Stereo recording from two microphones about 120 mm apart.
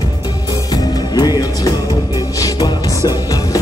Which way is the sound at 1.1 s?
35° left (ahead or behind).